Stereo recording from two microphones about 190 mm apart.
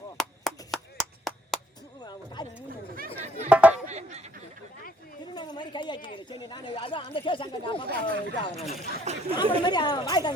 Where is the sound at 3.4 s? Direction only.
5° right (ahead or behind).